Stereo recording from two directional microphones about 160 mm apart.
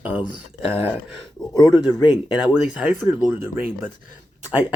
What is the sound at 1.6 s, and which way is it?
Speech, 25° left (ahead or behind).